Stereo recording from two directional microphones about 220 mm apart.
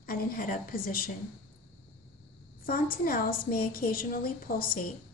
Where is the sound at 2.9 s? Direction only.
40° left (ahead or behind).